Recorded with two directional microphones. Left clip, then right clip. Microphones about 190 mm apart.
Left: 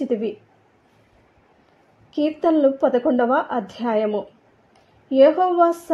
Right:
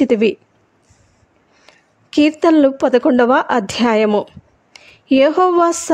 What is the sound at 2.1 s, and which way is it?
A woman's voice, 40° right (ahead or behind).